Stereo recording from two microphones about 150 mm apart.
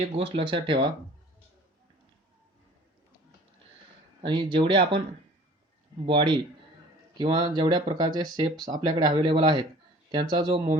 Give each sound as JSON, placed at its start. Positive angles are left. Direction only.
{"t": 0.2, "sound": "speech", "side_deg": -35}
{"t": 4.2, "sound": "speech", "side_deg": -35}
{"t": 6.1, "sound": "speech", "side_deg": -35}